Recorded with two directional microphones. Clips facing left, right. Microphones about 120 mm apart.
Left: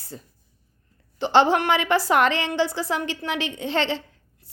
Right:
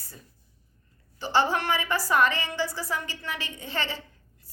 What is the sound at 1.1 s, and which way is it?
A woman's voice, 65° left (ahead or behind).